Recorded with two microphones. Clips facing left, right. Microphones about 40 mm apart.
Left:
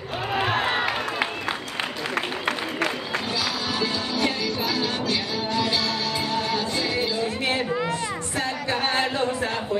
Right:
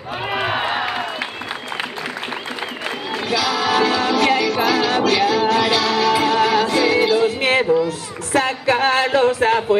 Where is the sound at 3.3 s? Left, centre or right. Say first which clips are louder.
Right 13 dB; right.